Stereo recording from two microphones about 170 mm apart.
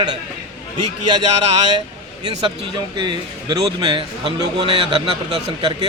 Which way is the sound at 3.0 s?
25° right (ahead or behind).